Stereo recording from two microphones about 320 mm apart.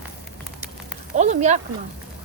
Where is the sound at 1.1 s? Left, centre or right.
Right.